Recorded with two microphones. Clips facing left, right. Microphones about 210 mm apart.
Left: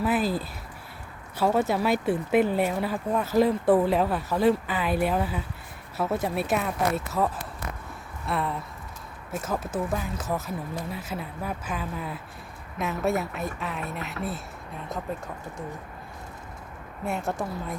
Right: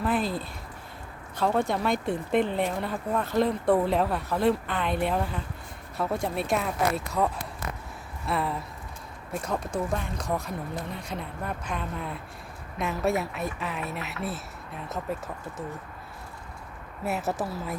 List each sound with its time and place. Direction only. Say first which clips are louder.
0.0 s speech: left 2 dB; 5° left (ahead or behind)
8.3 s speech: even; centre (ahead or behind)
17.1 s speech: even; 5° right (ahead or behind)